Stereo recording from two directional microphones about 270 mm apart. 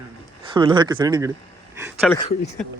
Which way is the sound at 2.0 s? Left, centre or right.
Centre.